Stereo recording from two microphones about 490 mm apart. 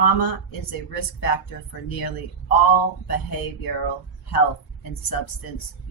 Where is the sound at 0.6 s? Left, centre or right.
Left.